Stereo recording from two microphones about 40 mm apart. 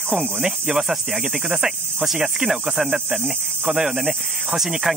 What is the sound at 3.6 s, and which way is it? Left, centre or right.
Speech, centre.